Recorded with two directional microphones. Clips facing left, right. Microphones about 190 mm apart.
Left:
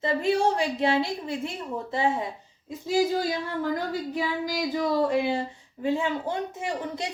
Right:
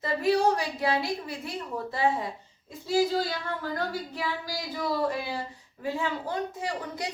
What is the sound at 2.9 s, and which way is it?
Speech, 15° left (ahead or behind).